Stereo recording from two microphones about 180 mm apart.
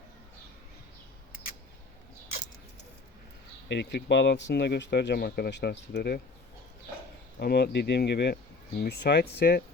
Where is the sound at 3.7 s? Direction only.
70° left (ahead or behind).